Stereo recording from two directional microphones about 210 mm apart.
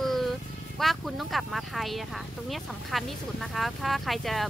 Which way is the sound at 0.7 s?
Centre (ahead or behind).